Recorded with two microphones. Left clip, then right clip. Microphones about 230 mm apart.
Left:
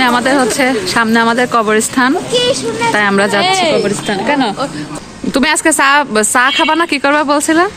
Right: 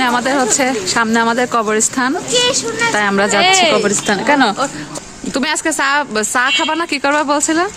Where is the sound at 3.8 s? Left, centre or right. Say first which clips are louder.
Even; right.